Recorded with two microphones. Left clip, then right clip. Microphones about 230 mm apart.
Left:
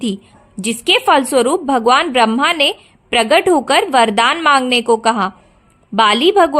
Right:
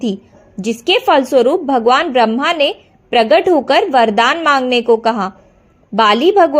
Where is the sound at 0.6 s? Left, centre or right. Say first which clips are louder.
Even; left.